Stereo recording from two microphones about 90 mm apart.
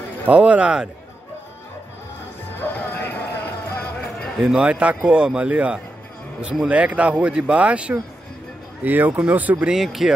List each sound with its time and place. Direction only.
0.3 s speech: 15° right (ahead or behind)
2.6 s music: 20° left (ahead or behind)
4.4 s speech: 10° right (ahead or behind)
9.8 s speech: centre (ahead or behind)